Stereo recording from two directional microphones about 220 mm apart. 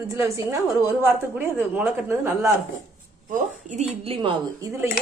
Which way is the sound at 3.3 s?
30° right (ahead or behind).